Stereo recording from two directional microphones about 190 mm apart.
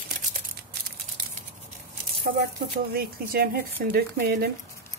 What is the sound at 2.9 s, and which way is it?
A woman's voice, 50° right (ahead or behind).